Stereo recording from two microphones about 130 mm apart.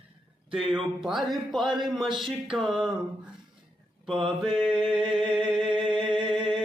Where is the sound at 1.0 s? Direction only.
Centre (ahead or behind).